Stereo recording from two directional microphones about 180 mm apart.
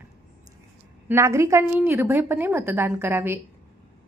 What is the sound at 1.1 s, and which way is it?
A woman's voice, 15° right (ahead or behind).